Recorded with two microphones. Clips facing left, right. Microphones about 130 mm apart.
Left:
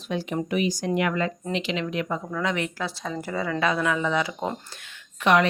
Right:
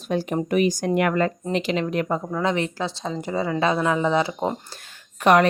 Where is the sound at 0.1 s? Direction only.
45° right (ahead or behind); by 4.5 s 25° right (ahead or behind).